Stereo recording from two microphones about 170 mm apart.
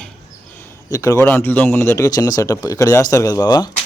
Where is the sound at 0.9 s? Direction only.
20° left (ahead or behind).